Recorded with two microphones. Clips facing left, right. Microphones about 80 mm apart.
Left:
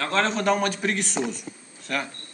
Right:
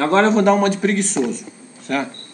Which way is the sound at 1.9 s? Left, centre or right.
Centre.